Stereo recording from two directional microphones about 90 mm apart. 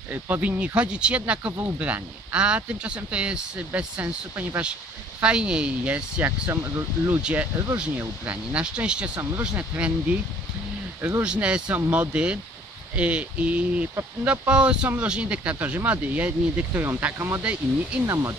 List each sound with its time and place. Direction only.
0.1 s speech: 20° right (ahead or behind)
6.5 s speech: 25° right (ahead or behind)
7.2 s speech: 10° right (ahead or behind); by 11.2 s 25° right (ahead or behind)
11.2 s speech: 15° right (ahead or behind); by 17.4 s 30° right (ahead or behind)
17.4 s speech: 15° right (ahead or behind)
18.0 s speech: 35° right (ahead or behind)